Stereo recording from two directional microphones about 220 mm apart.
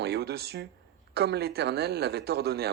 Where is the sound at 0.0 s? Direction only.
50° right (ahead or behind).